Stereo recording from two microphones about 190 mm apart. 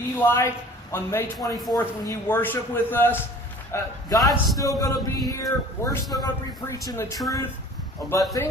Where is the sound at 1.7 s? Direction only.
15° left (ahead or behind).